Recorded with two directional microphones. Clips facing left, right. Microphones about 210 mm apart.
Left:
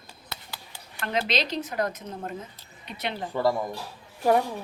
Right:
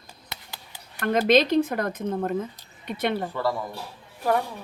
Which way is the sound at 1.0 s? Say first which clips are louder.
Right 8 dB; 50° right (ahead or behind).